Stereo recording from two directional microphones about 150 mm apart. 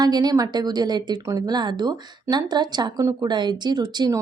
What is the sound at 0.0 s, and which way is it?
A woman's voice, 25° right (ahead or behind).